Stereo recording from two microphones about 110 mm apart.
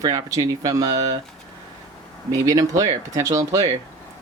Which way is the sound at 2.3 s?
30° right (ahead or behind).